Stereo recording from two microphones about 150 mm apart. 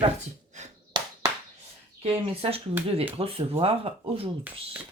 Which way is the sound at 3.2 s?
40° right (ahead or behind).